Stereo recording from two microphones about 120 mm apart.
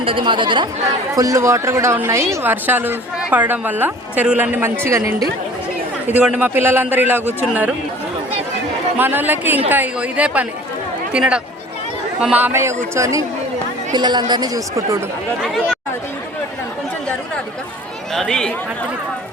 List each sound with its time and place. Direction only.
0.0 s speech: 45° right (ahead or behind)
1.1 s a woman's voice: 25° right (ahead or behind)
6.1 s a woman's voice: 10° right (ahead or behind)
9.0 s a woman's voice: 15° right (ahead or behind)
13.9 s speech: 35° right (ahead or behind)
15.4 s speech: centre (ahead or behind)
18.1 s speech: 5° left (ahead or behind)